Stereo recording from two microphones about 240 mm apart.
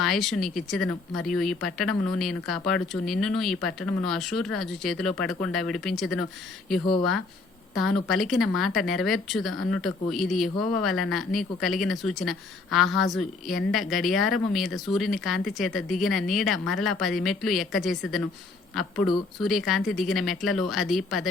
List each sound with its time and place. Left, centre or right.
0.0 s speech: centre